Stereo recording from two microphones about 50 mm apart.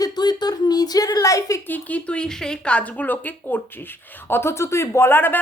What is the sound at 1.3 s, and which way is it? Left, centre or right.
Speech, left.